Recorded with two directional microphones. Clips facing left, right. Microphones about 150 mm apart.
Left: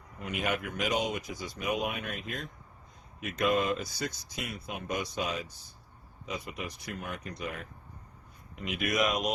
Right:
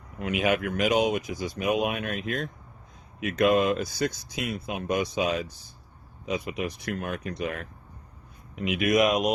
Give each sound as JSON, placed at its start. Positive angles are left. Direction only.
{"t": 0.2, "sound": "speech", "side_deg": -90}